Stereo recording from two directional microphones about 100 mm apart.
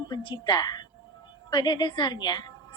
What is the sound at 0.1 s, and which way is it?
A woman's voice, 50° left (ahead or behind).